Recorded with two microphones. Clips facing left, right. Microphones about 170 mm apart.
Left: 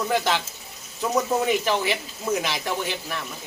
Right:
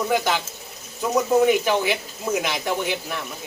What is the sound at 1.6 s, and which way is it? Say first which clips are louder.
Speech: right 2 dB; 10° right (ahead or behind).